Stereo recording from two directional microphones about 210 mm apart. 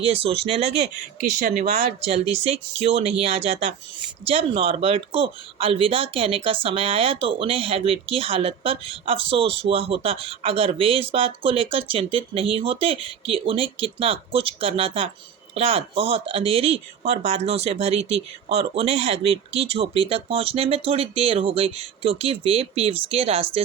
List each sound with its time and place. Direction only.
0.0 s speech: 30° right (ahead or behind)
2.1 s speech: 30° right (ahead or behind)